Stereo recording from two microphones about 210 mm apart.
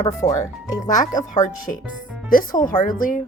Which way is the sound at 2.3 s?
40° left (ahead or behind).